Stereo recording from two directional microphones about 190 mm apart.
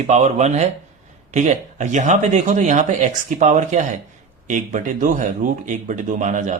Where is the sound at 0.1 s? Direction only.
40° right (ahead or behind).